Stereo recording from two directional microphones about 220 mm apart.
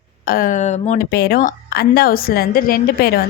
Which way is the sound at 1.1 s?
45° left (ahead or behind).